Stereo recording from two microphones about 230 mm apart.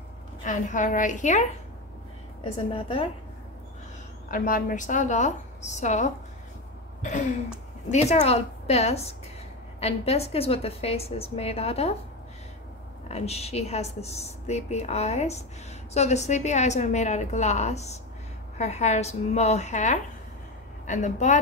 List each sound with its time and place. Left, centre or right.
0.4 s a woman's voice: left
4.3 s a woman's voice: left
7.0 s a sound: left
7.9 s speech: left
13.1 s a woman's voice: left